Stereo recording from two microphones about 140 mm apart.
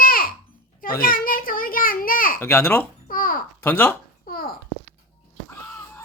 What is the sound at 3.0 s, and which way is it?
Babbling, 90° left.